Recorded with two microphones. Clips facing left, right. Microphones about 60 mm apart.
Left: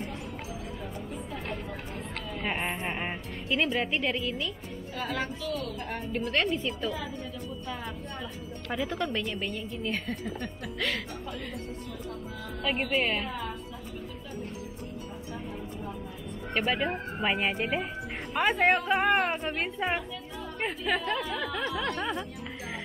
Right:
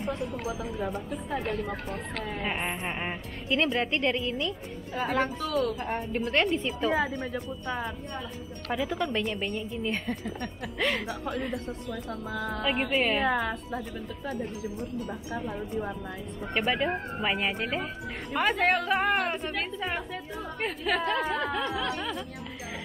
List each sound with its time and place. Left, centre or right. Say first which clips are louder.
0.5 s speech: right 7 dB; right
2.4 s speech: left 2 dB; centre
5.4 s a woman's voice: right 6 dB; right
5.9 s a woman's voice: right 2 dB; centre
6.9 s a woman's voice: right 7 dB; right
8.7 s a woman's voice: right 2 dB; centre
12.9 s speech: right 2 dB; centre
13.2 s a woman's voice: right 8 dB; right
16.5 s speech: right 1 dB; centre
17.6 s a woman's voice: left 1 dB; centre
18.3 s speech: left 1 dB; centre
19.4 s a woman's voice: left 1 dB; left
20.6 s speech: right 1 dB; centre
21.2 s speech: right 4 dB; right